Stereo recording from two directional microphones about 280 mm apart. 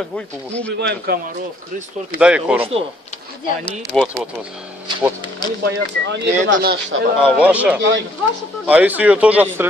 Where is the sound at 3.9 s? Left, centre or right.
Centre.